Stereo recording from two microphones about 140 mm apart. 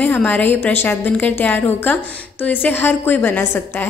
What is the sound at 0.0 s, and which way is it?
A woman's voice, 10° left (ahead or behind).